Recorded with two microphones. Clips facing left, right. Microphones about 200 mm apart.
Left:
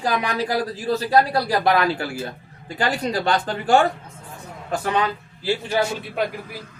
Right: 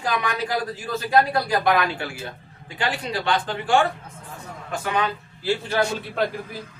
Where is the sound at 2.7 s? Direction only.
40° left (ahead or behind).